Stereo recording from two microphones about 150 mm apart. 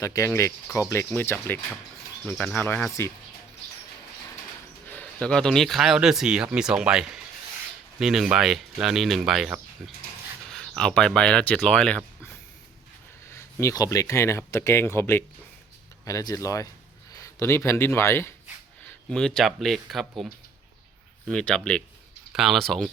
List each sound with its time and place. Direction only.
0.0 s speech: 20° left (ahead or behind)
4.9 s speech: 10° left (ahead or behind)
13.3 s speech: 20° left (ahead or behind)
19.0 s speech: 5° left (ahead or behind)